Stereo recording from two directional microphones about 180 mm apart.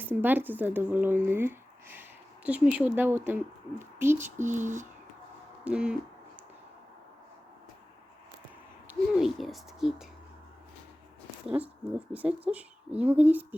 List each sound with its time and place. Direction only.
0.0 s speech: 10° right (ahead or behind)
4.4 s a sound: 45° right (ahead or behind)
5.6 s speech: 5° right (ahead or behind)
8.9 s speech: 5° right (ahead or behind)
11.9 s speech: 10° right (ahead or behind)